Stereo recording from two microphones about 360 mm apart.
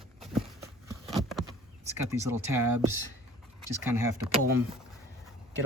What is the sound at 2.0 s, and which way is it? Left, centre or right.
Speech, centre.